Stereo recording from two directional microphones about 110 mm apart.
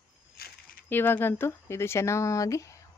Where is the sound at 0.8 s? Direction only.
20° left (ahead or behind).